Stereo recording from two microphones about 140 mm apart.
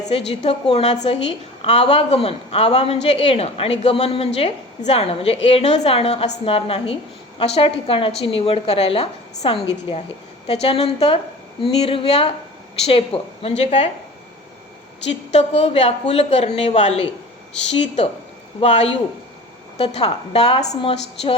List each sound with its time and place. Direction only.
0.0 s a woman's voice: 45° left (ahead or behind)
15.3 s a woman's voice: 50° left (ahead or behind)